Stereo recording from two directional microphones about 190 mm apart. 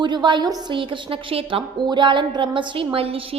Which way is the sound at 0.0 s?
25° right (ahead or behind).